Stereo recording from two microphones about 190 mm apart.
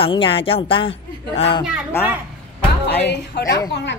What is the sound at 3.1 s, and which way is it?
Speech, 60° left (ahead or behind).